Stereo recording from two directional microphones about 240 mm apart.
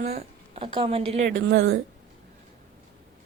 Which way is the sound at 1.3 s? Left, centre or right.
Right.